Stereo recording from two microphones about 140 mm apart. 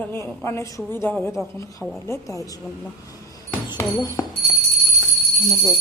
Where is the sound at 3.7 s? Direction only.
30° left (ahead or behind).